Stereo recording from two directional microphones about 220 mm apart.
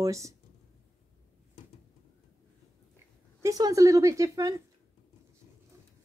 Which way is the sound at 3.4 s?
15° right (ahead or behind).